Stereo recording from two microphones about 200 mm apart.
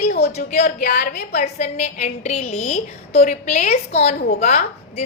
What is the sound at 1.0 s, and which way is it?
Speech, 55° left (ahead or behind).